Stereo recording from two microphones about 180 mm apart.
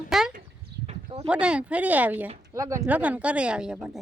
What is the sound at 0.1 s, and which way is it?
Chicken, centre (ahead or behind).